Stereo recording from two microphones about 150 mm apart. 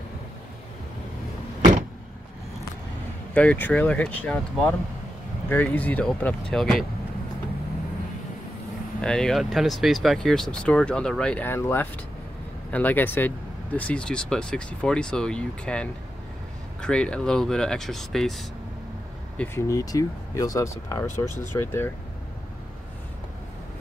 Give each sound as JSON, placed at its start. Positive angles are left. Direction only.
{"t": 3.3, "sound": "speech", "side_deg": 10}
{"t": 9.0, "sound": "speech", "side_deg": 5}
{"t": 19.3, "sound": "speech", "side_deg": 15}